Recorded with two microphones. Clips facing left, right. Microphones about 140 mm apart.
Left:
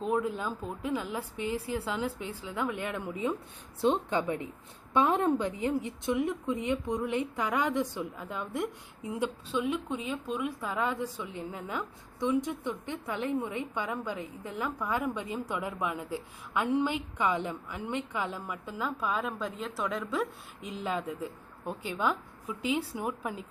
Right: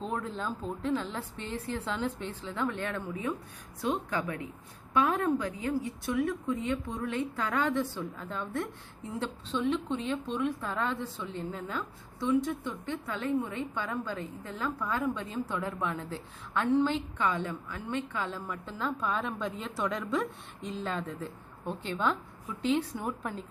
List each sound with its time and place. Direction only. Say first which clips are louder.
0.0 s a woman's voice: left 4 dB; 10° left (ahead or behind)